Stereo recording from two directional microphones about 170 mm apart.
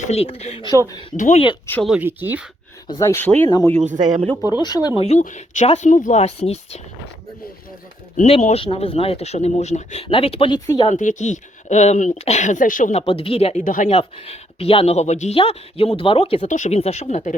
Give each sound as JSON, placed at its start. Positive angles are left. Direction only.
{"t": 0.0, "sound": "speech", "side_deg": 35}
{"t": 1.1, "sound": "speech", "side_deg": 45}
{"t": 1.7, "sound": "speech", "side_deg": 0}
{"t": 2.0, "sound": "speech", "side_deg": -10}
{"t": 2.8, "sound": "speech", "side_deg": 20}
{"t": 3.8, "sound": "speech", "side_deg": -45}
{"t": 4.5, "sound": "speech", "side_deg": 25}
{"t": 4.9, "sound": "speech", "side_deg": 40}
{"t": 8.3, "sound": "speech", "side_deg": 40}
{"t": 10.8, "sound": "speech", "side_deg": 45}
{"t": 16.5, "sound": "speech", "side_deg": 45}